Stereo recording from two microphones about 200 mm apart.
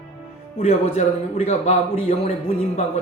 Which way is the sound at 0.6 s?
30° left (ahead or behind).